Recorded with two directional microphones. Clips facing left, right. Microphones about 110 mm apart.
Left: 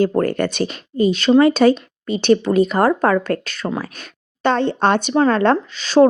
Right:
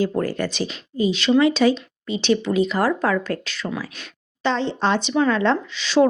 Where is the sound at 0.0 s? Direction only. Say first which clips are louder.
Left 5 dB; 55° left (ahead or behind).